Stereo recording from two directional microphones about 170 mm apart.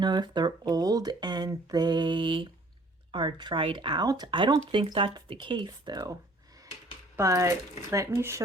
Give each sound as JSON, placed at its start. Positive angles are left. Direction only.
{"t": 0.0, "sound": "speech", "side_deg": -25}
{"t": 7.2, "sound": "speech", "side_deg": -20}